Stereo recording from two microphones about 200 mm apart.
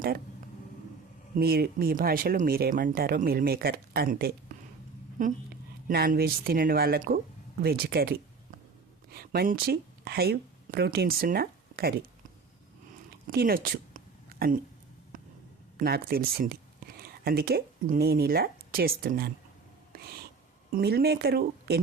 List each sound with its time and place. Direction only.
1.4 s speech: 50° right (ahead or behind)
5.9 s speech: 50° right (ahead or behind)
13.3 s a sound: 50° right (ahead or behind)
15.8 s speech: 50° right (ahead or behind)
20.7 s speech: 50° right (ahead or behind)